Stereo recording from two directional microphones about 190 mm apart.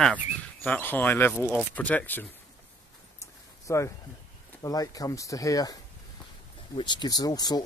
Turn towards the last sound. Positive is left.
turn(degrees=20)  # may be behind; listen again after turning